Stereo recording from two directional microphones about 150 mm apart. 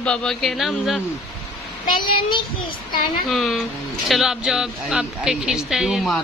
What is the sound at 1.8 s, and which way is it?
Speech, 30° left (ahead or behind).